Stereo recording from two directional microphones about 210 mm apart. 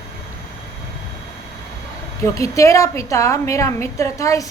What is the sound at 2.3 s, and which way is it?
A woman's voice, 15° left (ahead or behind).